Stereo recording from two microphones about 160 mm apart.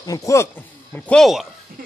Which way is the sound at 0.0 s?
20° left (ahead or behind).